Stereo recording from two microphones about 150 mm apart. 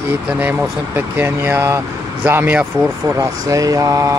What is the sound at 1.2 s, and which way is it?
Speech, 15° right (ahead or behind).